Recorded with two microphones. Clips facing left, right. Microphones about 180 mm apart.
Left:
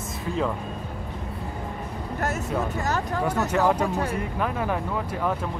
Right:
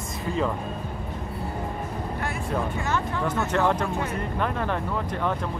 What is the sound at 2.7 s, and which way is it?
Speech, 40° left (ahead or behind).